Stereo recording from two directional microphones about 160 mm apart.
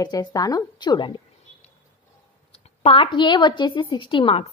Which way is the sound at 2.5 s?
35° left (ahead or behind).